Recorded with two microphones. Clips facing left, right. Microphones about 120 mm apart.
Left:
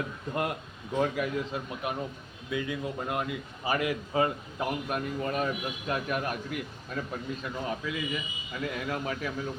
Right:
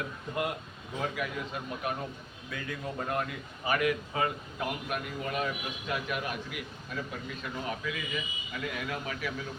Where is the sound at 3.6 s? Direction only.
30° left (ahead or behind).